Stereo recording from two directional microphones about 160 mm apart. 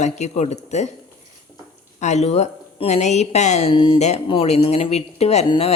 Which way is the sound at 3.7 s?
30° left (ahead or behind).